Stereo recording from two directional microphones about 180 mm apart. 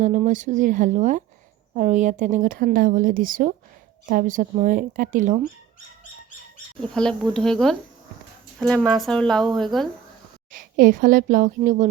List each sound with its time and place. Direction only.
0.3 s a woman's voice: 45° right (ahead or behind)
6.7 s speech: 5° left (ahead or behind)
10.5 s a woman's voice: 50° right (ahead or behind)